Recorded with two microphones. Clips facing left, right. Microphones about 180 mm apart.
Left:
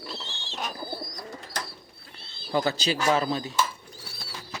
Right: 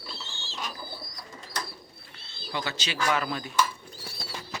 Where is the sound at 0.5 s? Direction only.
50° left (ahead or behind).